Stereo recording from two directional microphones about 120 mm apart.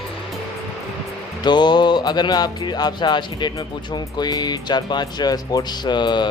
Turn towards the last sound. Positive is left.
turn(degrees=40)  # may be behind; listen again after turning